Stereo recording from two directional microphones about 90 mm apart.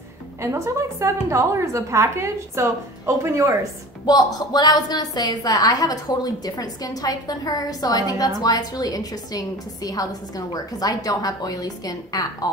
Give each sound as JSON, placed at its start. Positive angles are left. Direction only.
{"t": 0.4, "sound": "a woman's voice", "side_deg": -30}
{"t": 4.0, "sound": "a woman's voice", "side_deg": 50}